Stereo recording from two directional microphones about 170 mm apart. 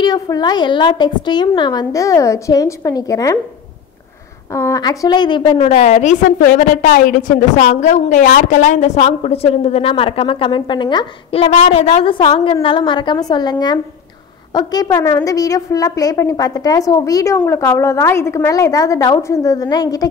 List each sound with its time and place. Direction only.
0.0 s a woman's voice: 25° left (ahead or behind)
4.5 s a woman's voice: 20° left (ahead or behind); by 6.1 s 40° left (ahead or behind)
6.4 s a woman's voice: 55° left (ahead or behind); by 20.1 s 20° left (ahead or behind)